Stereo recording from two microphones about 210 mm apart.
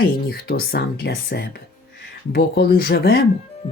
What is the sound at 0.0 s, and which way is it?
Speech, 45° left (ahead or behind).